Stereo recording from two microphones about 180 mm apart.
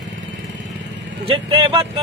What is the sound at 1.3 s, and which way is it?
Speech, 30° right (ahead or behind).